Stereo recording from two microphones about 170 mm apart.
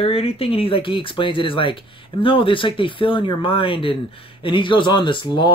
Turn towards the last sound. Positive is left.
turn(degrees=30)  # may be behind; listen again after turning